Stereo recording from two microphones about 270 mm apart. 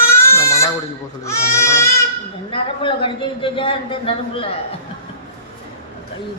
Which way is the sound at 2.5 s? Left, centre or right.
Centre.